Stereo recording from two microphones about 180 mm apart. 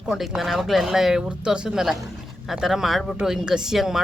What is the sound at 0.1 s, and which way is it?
Speech, centre (ahead or behind).